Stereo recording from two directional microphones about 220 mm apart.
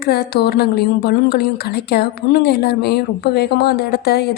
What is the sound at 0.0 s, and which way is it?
Speech, 45° left (ahead or behind).